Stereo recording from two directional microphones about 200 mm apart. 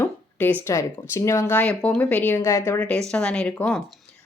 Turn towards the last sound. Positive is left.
turn(degrees=0)  # may be behind; listen again after turning